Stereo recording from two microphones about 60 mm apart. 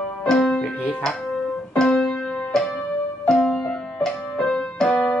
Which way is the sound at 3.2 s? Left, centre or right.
Centre.